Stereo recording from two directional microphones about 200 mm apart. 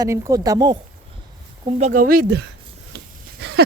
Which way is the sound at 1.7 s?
35° right (ahead or behind).